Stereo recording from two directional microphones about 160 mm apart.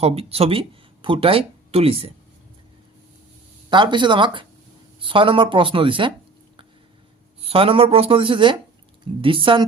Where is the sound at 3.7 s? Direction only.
30° right (ahead or behind).